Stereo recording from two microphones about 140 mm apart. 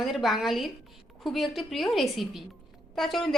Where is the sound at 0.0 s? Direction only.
Centre (ahead or behind).